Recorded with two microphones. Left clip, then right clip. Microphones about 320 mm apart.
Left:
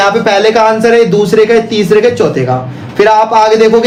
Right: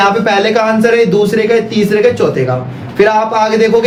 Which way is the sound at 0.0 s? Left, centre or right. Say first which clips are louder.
Left 2 dB; left.